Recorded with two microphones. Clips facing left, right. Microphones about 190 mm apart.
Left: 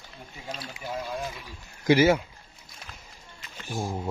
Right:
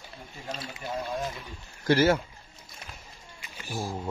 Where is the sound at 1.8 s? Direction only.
15° left (ahead or behind).